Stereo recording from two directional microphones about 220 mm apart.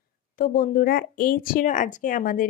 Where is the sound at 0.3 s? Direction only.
40° left (ahead or behind).